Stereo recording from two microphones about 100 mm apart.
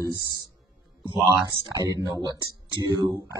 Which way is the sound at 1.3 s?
40° right (ahead or behind).